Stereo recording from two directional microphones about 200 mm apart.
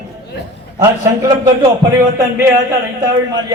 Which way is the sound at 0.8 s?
15° right (ahead or behind).